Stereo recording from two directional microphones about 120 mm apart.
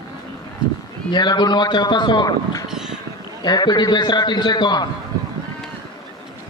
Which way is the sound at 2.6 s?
5° right (ahead or behind).